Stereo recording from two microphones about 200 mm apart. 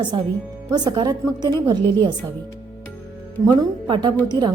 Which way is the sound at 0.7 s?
20° right (ahead or behind).